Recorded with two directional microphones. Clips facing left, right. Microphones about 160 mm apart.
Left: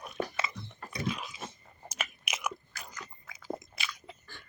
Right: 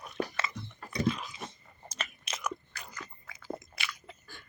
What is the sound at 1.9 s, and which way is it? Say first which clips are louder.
Biting: left 1 dB; 10° left (ahead or behind).